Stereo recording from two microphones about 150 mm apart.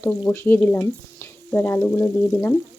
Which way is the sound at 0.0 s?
15° left (ahead or behind).